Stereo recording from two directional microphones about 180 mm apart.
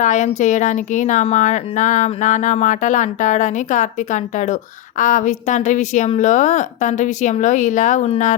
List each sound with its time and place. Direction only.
0.0 s a woman's voice: 45° left (ahead or behind)